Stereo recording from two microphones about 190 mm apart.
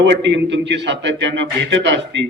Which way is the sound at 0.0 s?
70° right (ahead or behind).